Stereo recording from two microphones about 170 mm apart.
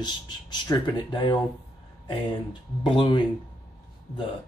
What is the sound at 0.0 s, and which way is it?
Speech, 25° left (ahead or behind).